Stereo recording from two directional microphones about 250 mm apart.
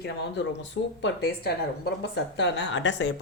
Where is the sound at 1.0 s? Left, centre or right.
Left.